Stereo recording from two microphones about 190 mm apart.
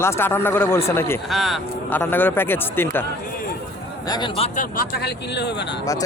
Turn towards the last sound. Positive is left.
turn(degrees=65)  # may be behind; listen again after turning